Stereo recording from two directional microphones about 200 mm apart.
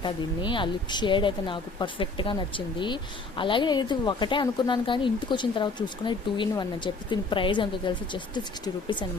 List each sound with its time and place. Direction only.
0.0 s speech: 25° left (ahead or behind)